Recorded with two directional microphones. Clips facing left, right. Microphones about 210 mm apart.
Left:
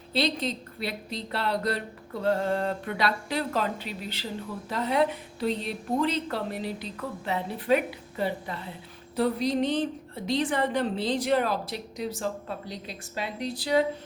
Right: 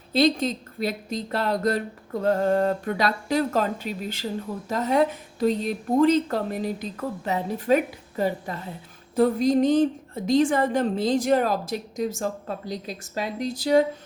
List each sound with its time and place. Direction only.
0.1 s a woman's voice: 45° right (ahead or behind)